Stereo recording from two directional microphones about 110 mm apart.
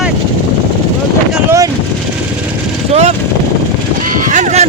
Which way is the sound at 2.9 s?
80° right.